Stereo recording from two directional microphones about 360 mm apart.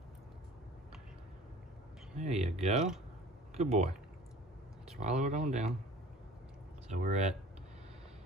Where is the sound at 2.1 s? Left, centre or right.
Centre.